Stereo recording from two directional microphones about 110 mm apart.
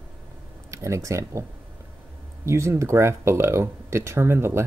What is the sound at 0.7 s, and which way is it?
Speech, 25° right (ahead or behind).